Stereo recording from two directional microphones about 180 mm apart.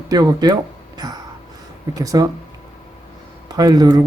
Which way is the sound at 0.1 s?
20° right (ahead or behind).